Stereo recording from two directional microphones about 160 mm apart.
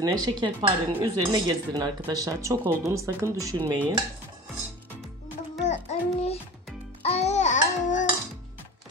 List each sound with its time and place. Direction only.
0.0 s speech: 25° right (ahead or behind)
5.7 s child singing: 45° left (ahead or behind)
7.0 s babbling: 40° left (ahead or behind)